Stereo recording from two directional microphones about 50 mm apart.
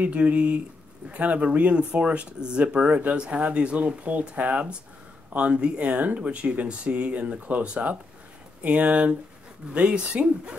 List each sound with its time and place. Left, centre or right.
0.0 s speech: right